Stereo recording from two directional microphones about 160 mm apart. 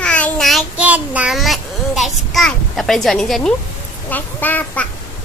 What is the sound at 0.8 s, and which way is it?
A child's voice, 10° right (ahead or behind).